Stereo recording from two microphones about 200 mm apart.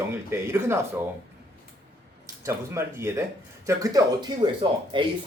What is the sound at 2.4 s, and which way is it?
A man's voice, 15° right (ahead or behind).